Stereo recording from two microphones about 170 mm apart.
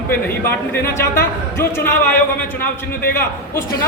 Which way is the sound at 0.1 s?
15° left (ahead or behind).